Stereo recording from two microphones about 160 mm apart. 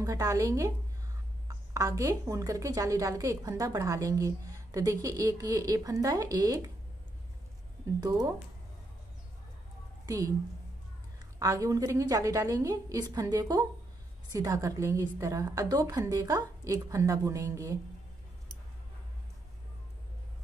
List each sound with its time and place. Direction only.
0.0 s a woman's voice: 20° right (ahead or behind)
1.7 s a woman's voice: 20° right (ahead or behind)
8.0 s a woman's voice: 20° right (ahead or behind)
10.0 s a woman's voice: 20° right (ahead or behind)
11.3 s a woman's voice: 20° right (ahead or behind)